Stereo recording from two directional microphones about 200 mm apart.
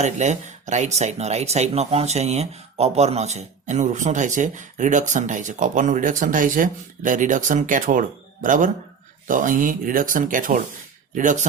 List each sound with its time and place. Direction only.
0.0 s speech: 35° right (ahead or behind)